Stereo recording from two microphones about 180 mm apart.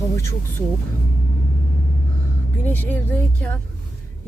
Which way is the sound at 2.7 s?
10° left (ahead or behind).